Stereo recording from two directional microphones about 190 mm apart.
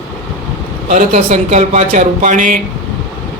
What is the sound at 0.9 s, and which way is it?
Speech, 40° right (ahead or behind).